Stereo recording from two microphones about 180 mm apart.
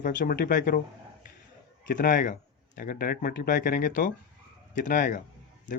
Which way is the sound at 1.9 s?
50° left (ahead or behind).